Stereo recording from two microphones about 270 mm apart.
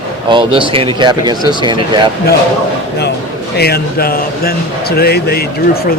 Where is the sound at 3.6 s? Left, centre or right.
Left.